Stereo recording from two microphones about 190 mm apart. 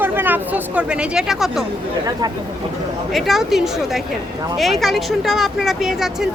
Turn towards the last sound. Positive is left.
turn(degrees=0)  # may be behind; listen again after turning